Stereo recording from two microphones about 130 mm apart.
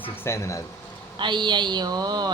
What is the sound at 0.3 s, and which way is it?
Speech, 20° left (ahead or behind).